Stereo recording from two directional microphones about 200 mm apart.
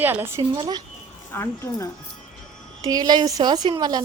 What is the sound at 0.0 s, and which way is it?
Speech, 10° right (ahead or behind).